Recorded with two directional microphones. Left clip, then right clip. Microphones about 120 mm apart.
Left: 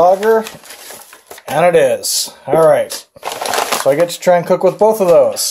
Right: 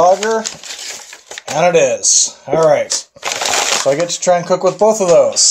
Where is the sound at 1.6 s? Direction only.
30° left (ahead or behind).